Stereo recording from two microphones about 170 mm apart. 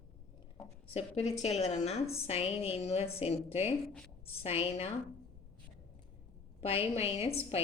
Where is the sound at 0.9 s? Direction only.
40° left (ahead or behind).